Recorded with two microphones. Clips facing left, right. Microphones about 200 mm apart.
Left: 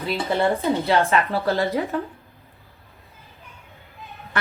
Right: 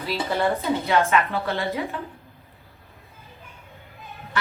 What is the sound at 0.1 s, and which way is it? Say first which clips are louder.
A woman's voice: left 2 dB; 25° left (ahead or behind).